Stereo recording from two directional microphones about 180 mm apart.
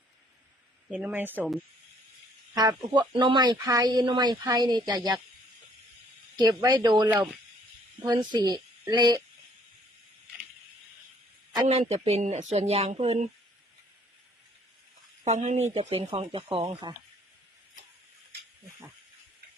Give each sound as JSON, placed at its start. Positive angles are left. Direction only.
{"t": 0.9, "sound": "speech", "side_deg": -5}
{"t": 2.6, "sound": "speech", "side_deg": -20}
{"t": 6.3, "sound": "speech", "side_deg": -20}
{"t": 8.0, "sound": "speech", "side_deg": -25}
{"t": 11.7, "sound": "speech", "side_deg": -35}
{"t": 15.2, "sound": "speech", "side_deg": -40}